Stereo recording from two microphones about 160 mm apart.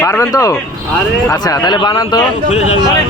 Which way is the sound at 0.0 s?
15° left (ahead or behind).